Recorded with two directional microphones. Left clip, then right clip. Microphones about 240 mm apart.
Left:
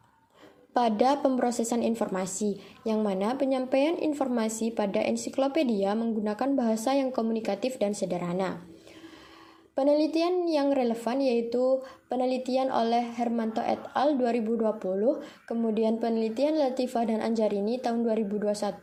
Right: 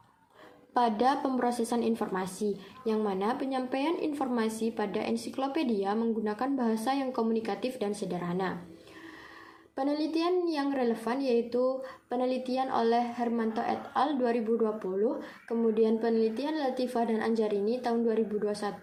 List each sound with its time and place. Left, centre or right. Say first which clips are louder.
0.7 s a woman's voice: left 2 dB; left
9.7 s a woman's voice: left 6 dB; left